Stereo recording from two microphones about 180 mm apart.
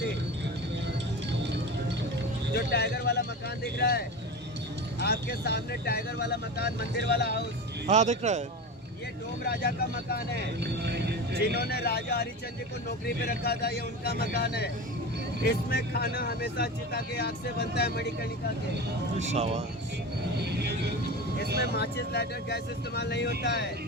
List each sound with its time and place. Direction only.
2.6 s speech: 65° left (ahead or behind)
7.9 s speech: 40° right (ahead or behind)
9.5 s speech: 65° left (ahead or behind)
10.3 s speech: 65° right (ahead or behind)
11.5 s speech: 60° left (ahead or behind)
19.2 s speech: 40° right (ahead or behind)
20.4 s speech: 65° right (ahead or behind)
21.8 s speech: 65° left (ahead or behind)